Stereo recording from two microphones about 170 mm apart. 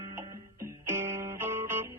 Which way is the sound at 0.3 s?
15° right (ahead or behind).